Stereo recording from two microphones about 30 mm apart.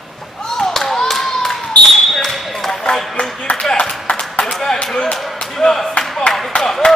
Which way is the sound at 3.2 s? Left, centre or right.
Left.